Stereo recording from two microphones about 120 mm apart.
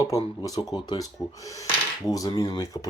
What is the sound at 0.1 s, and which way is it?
Speech, 30° left (ahead or behind).